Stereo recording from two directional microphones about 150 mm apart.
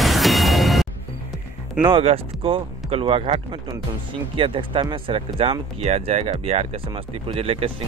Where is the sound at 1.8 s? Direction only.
30° right (ahead or behind).